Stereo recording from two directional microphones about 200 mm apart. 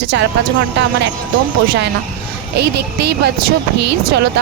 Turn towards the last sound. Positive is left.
turn(degrees=-55)  # may be behind; listen again after turning